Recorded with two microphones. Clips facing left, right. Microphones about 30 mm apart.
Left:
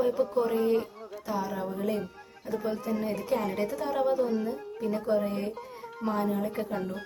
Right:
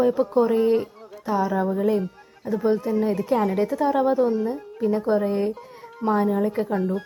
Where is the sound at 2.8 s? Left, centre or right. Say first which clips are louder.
Right 8 dB; centre.